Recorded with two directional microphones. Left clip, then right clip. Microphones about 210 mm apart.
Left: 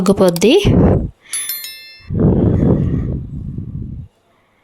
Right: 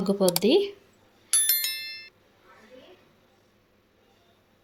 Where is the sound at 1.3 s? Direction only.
Centre (ahead or behind).